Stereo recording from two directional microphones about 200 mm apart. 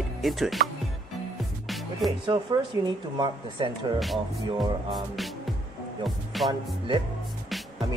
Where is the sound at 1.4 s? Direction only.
Centre (ahead or behind).